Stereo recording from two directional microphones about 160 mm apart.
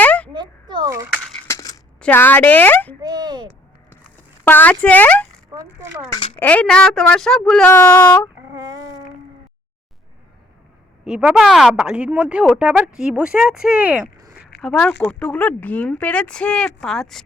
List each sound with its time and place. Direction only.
0.0 s a sound: 10° left (ahead or behind)
0.3 s a child's voice: 30° right (ahead or behind)
1.5 s coin: 20° left (ahead or behind)
2.0 s speech: 10° left (ahead or behind)
3.0 s a child's voice: 25° right (ahead or behind)
4.4 s speech: 10° left (ahead or behind)
6.3 s speech: 10° left (ahead or behind)
7.7 s speech: 15° left (ahead or behind)
8.4 s a sound: 20° right (ahead or behind)
11.0 s speech: 5° right (ahead or behind)
14.6 s speech: 5° left (ahead or behind)